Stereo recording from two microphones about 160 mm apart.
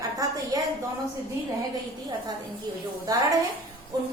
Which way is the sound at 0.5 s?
20° right (ahead or behind).